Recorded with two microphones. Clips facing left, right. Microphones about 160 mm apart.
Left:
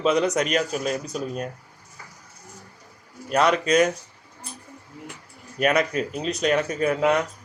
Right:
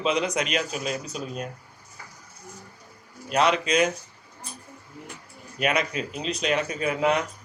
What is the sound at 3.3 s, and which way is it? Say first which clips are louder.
Speech: left 3 dB; 45° left (ahead or behind).